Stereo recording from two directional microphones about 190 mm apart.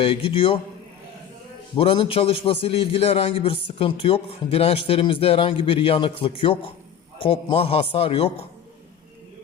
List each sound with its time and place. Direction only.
0.0 s a man's voice: 30° left (ahead or behind)
1.7 s a man's voice: 30° left (ahead or behind)